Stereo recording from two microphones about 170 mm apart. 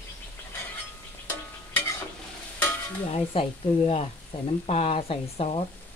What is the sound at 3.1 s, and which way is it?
Speech, 35° left (ahead or behind).